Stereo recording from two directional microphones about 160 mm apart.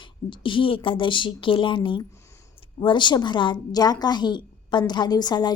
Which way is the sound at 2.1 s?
20° left (ahead or behind).